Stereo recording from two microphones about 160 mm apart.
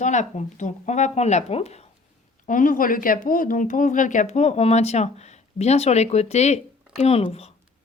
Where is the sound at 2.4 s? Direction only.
55° left (ahead or behind).